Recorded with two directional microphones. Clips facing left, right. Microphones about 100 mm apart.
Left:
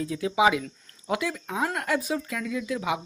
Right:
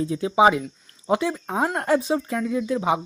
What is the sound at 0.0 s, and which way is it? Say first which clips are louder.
Speech: right 5 dB; 30° right (ahead or behind).